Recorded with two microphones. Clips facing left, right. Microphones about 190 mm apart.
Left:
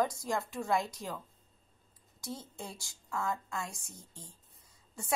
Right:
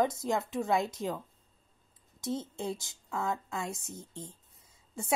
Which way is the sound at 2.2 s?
25° right (ahead or behind).